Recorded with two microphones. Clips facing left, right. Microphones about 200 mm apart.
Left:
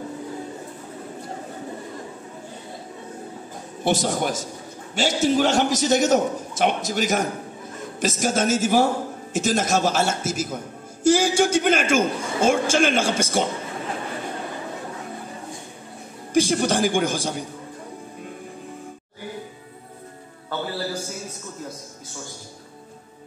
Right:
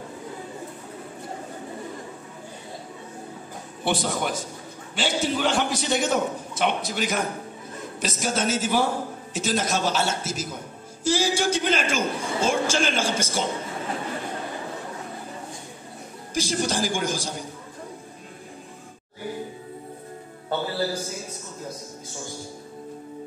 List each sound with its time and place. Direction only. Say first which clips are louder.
3.8 s a man's voice: left 3 dB; 45° left (ahead or behind)
16.3 s a man's voice: left 6 dB; 55° left (ahead or behind)